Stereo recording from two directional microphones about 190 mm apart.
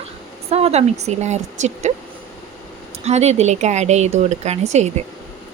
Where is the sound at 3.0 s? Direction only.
35° right (ahead or behind).